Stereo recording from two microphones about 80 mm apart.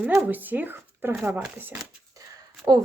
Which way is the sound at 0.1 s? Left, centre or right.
Right.